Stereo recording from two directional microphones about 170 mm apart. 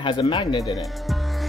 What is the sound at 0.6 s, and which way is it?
Speech, centre (ahead or behind).